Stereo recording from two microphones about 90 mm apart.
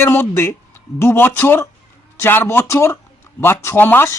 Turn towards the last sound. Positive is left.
turn(degrees=25)  # may be behind; listen again after turning